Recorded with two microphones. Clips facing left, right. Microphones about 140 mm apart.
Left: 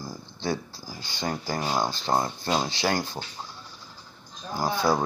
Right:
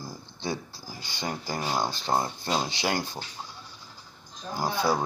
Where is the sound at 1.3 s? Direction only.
45° left (ahead or behind).